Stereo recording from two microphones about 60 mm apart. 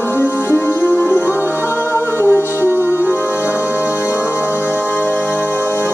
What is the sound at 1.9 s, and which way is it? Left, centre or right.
Music, right.